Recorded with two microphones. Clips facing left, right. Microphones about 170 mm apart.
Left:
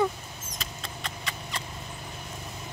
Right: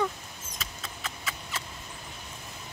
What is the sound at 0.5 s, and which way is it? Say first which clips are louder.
Mouse: left 2 dB; 5° right (ahead or behind).